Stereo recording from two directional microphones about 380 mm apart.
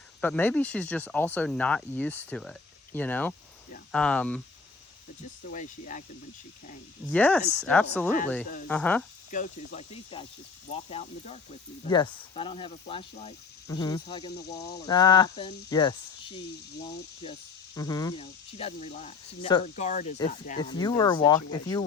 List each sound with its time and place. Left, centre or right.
0.2 s speech: centre
5.5 s speech: centre
7.1 s speech: centre
9.3 s speech: centre
14.4 s speech: left
14.8 s speech: centre
17.7 s speech: centre